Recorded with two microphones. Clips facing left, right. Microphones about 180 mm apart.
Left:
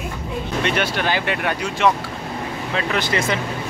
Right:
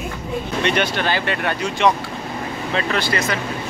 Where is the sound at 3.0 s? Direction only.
20° left (ahead or behind).